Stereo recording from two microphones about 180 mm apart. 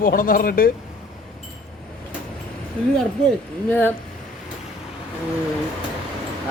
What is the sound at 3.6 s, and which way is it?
Speech, 10° left (ahead or behind).